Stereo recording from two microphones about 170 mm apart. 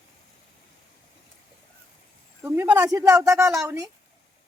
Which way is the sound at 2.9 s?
20° right (ahead or behind).